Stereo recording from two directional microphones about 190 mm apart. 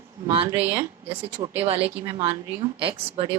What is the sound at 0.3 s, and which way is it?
Speech, 30° right (ahead or behind).